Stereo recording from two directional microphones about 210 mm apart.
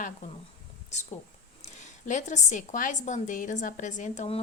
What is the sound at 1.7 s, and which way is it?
A woman's voice, 35° left (ahead or behind).